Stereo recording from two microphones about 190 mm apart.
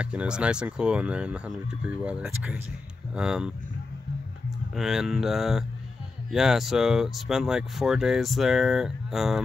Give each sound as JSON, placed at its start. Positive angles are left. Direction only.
{"t": 0.0, "sound": "speech", "side_deg": -5}
{"t": 4.7, "sound": "speech", "side_deg": 0}